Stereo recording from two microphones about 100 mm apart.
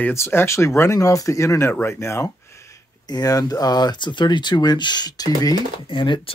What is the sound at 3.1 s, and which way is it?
Speech, 40° left (ahead or behind).